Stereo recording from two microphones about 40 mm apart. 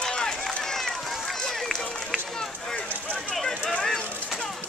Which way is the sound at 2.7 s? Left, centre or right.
Left.